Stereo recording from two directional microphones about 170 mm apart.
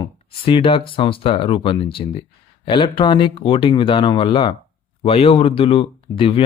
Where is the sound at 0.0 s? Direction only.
30° left (ahead or behind).